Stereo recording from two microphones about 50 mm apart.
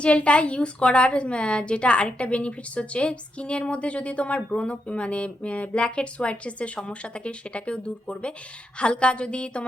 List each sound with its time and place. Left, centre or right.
0.0 s a woman's voice: left